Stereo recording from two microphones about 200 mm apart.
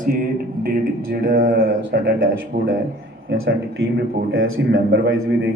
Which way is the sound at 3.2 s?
70° right (ahead or behind).